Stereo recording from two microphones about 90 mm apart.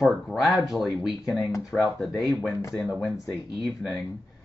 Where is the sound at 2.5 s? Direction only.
30° left (ahead or behind).